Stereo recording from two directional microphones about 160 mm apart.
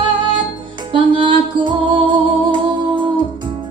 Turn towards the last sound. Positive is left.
turn(degrees=-30)  # may be behind; listen again after turning